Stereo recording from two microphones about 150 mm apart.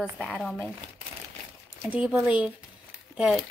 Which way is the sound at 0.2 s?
Centre (ahead or behind).